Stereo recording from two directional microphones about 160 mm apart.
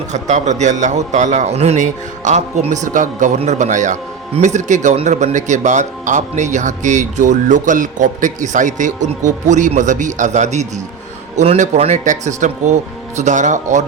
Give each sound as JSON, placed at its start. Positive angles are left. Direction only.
{"t": 0.1, "sound": "speech", "side_deg": -45}